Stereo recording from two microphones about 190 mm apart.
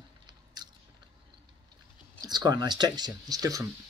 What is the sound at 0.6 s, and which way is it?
Biting, 20° right (ahead or behind).